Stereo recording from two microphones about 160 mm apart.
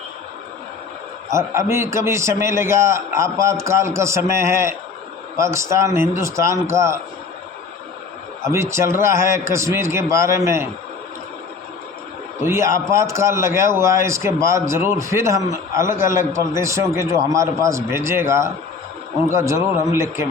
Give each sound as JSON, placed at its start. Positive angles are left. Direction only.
{"t": 1.3, "sound": "a man's voice", "side_deg": -15}
{"t": 8.4, "sound": "a man's voice", "side_deg": -15}
{"t": 12.5, "sound": "a man's voice", "side_deg": -20}